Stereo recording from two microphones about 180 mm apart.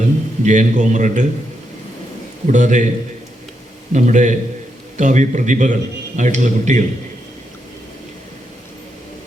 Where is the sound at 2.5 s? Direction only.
45° right (ahead or behind).